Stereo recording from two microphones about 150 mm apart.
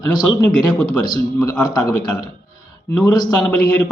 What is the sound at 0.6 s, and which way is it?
Speech, 30° left (ahead or behind).